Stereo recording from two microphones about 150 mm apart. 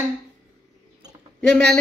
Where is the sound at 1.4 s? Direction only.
5° left (ahead or behind).